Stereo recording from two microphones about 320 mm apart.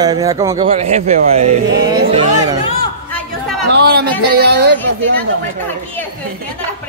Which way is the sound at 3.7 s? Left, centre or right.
Right.